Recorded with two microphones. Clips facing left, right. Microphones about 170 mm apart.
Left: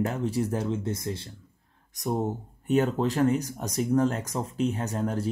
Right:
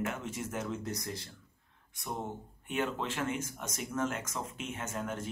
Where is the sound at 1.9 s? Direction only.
40° left (ahead or behind).